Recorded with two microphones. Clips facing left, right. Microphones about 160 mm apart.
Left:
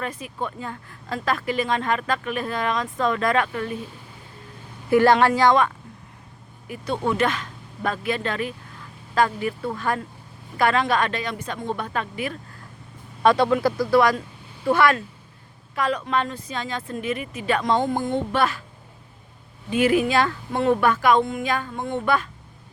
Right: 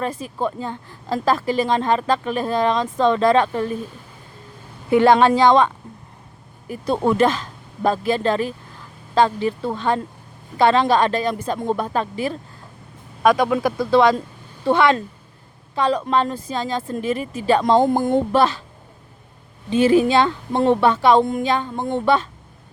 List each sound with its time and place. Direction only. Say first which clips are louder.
0.2 s speech: right 6 dB; 30° right (ahead or behind)
4.9 s a woman's voice: right 3 dB; 20° right (ahead or behind)
6.7 s a woman's voice: right 5 dB; 40° right (ahead or behind)
13.2 s speech: right 1 dB; 15° right (ahead or behind); by 18.4 s 40° right (ahead or behind)
19.7 s a woman's voice: right 4 dB; 30° right (ahead or behind)